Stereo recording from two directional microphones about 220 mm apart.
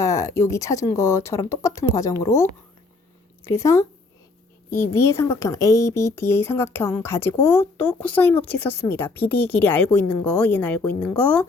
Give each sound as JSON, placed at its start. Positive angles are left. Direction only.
{"t": 0.0, "sound": "speech", "side_deg": 15}